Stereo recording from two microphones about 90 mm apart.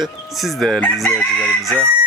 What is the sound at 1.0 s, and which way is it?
Crowing, 5° left (ahead or behind).